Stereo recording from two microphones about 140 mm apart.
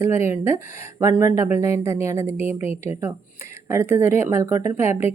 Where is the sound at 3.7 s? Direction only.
20° right (ahead or behind).